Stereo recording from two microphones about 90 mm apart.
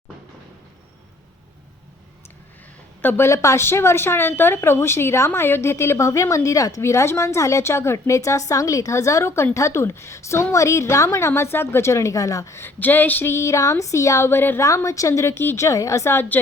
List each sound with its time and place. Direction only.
3.0 s a woman's voice: 20° left (ahead or behind)
3.2 s speech: 35° left (ahead or behind)
14.6 s speech: 35° left (ahead or behind)